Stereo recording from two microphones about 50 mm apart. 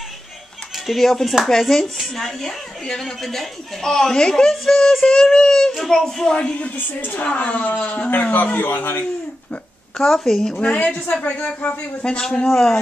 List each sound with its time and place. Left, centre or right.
0.8 s a woman's voice: centre
6.3 s speech: left
7.0 s speech: left
9.9 s a woman's voice: centre
10.6 s speech: left
12.4 s a woman's voice: centre